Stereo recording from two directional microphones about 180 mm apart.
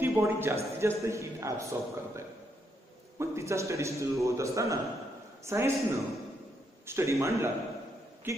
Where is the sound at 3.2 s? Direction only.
15° right (ahead or behind).